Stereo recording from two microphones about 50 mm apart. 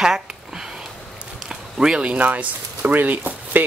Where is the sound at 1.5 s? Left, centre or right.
Centre.